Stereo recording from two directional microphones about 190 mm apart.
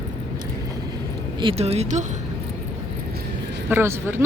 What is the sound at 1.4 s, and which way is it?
Speech, 30° right (ahead or behind).